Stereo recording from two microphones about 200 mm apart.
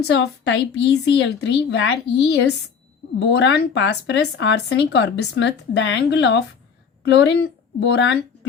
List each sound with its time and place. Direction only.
0.0 s a woman's voice: 65° left (ahead or behind)